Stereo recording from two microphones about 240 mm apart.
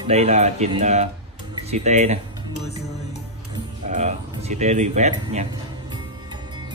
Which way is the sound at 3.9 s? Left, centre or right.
Right.